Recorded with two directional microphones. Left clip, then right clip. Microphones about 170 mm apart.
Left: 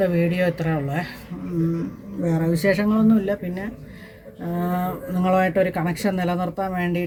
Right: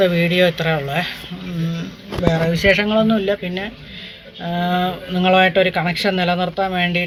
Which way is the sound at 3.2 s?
Centre (ahead or behind).